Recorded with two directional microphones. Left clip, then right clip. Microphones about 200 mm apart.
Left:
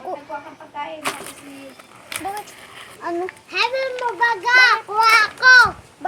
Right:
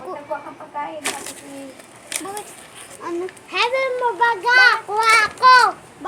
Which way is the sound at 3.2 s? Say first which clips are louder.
Right 2 dB; centre (ahead or behind).